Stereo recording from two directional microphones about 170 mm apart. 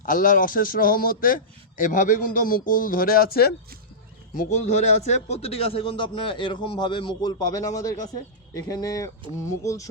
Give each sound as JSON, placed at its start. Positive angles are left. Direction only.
{"t": 0.0, "sound": "a man's voice", "side_deg": 55}
{"t": 4.4, "sound": "a man's voice", "side_deg": 45}